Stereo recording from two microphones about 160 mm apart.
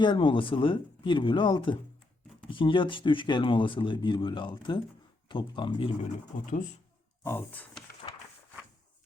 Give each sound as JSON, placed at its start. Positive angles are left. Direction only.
{"t": 0.0, "sound": "speech", "side_deg": 30}
{"t": 6.4, "sound": "speech", "side_deg": 55}
{"t": 7.3, "sound": "speech", "side_deg": 10}